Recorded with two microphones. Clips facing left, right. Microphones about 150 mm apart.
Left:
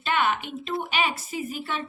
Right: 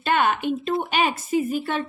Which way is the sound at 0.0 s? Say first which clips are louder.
Right 4 dB; 50° right (ahead or behind).